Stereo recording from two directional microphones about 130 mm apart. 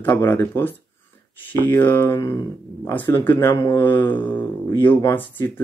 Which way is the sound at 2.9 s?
15° left (ahead or behind).